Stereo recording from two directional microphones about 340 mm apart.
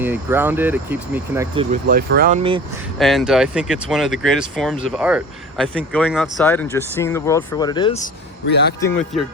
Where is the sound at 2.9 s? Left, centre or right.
Centre.